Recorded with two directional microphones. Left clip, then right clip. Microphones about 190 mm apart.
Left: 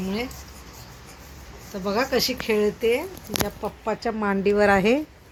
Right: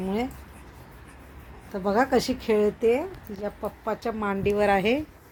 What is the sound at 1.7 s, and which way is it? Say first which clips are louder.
Speech: right 1 dB; 30° right (ahead or behind).